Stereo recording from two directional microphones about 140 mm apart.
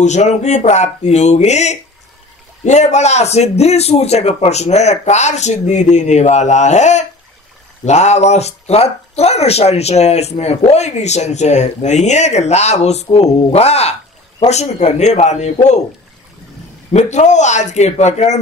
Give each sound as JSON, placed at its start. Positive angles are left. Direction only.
{"t": 0.0, "sound": "speech", "side_deg": 55}
{"t": 16.9, "sound": "speech", "side_deg": 55}